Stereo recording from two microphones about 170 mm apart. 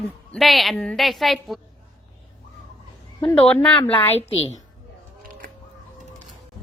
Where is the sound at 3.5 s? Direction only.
10° left (ahead or behind).